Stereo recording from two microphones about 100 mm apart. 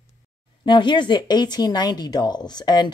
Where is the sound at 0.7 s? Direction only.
50° left (ahead or behind).